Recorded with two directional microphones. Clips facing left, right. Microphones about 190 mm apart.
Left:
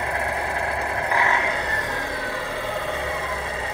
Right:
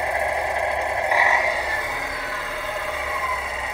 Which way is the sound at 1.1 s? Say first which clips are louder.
Right 1 dB; 10° right (ahead or behind).